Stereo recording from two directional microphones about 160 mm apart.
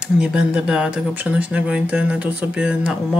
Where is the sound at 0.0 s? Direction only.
5° right (ahead or behind).